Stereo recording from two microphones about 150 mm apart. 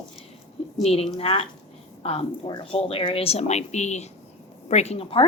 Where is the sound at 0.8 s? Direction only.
45° left (ahead or behind).